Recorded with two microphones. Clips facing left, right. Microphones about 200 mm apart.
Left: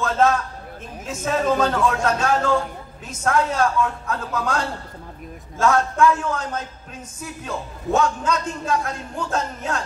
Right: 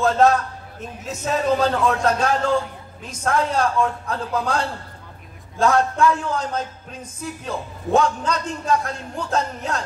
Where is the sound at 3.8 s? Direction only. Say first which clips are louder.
Right 1 dB; 35° right (ahead or behind).